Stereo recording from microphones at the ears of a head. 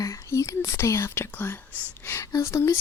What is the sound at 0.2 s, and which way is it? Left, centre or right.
Speech, left.